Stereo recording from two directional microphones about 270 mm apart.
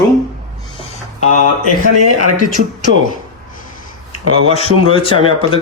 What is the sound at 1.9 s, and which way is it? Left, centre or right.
Speech, left.